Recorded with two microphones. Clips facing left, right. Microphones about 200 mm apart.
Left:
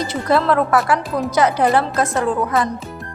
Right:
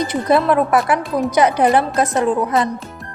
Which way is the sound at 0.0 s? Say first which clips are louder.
Right 2 dB; 20° right (ahead or behind).